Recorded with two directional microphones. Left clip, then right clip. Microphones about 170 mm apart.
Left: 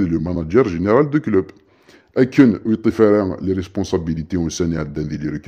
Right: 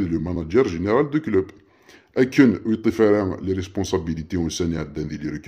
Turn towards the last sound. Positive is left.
turn(degrees=25)  # may be behind; listen again after turning